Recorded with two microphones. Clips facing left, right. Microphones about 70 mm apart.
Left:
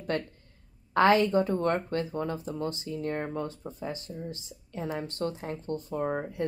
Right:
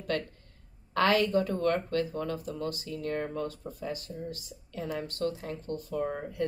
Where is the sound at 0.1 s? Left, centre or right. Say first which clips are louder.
Left 1 dB; left.